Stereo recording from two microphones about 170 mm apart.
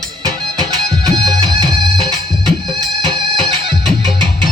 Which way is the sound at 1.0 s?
25° right (ahead or behind).